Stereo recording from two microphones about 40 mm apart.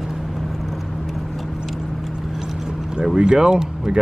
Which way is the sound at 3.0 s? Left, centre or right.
Centre.